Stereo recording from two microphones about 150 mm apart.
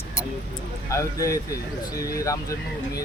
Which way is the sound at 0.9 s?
20° left (ahead or behind).